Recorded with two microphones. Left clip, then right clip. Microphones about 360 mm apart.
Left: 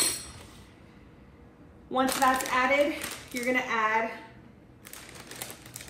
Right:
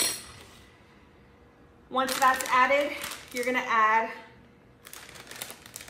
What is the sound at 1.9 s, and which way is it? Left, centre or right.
A woman's voice, centre.